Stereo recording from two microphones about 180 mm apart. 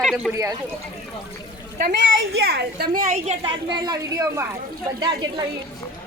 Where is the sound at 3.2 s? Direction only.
35° right (ahead or behind).